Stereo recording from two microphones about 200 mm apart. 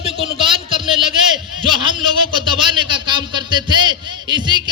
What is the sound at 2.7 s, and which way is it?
A man's voice, 25° right (ahead or behind).